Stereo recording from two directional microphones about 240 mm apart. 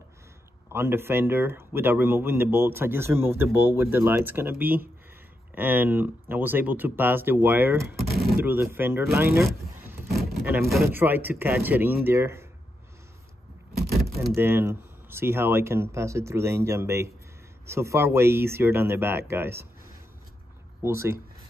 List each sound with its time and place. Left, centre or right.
0.7 s speech: centre
10.0 s vehicle: right
10.5 s speech: centre
14.1 s speech: centre
20.8 s speech: centre